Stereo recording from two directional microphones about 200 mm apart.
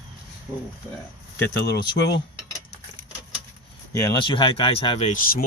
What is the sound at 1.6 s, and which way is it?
Speech, 60° left (ahead or behind).